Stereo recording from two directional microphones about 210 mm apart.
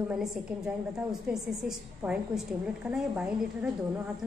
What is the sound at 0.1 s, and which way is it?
A woman's voice, 5° right (ahead or behind).